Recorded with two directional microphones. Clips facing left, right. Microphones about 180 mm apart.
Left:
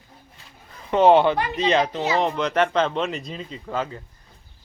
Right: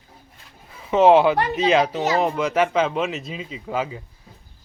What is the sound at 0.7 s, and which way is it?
A man's voice, 5° right (ahead or behind).